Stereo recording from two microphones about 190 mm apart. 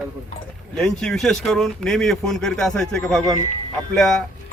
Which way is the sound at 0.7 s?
5° left (ahead or behind).